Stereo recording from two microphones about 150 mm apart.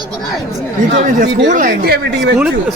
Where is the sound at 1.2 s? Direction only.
65° right (ahead or behind); by 2.0 s 80° right.